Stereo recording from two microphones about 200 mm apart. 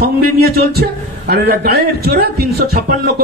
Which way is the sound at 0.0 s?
50° right (ahead or behind).